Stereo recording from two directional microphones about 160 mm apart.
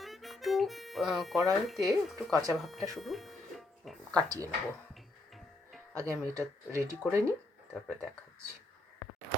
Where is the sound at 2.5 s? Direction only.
Centre (ahead or behind).